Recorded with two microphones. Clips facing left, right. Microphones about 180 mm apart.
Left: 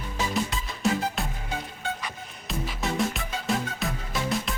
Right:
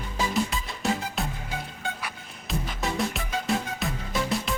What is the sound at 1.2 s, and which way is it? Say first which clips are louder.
Music: even; centre (ahead or behind).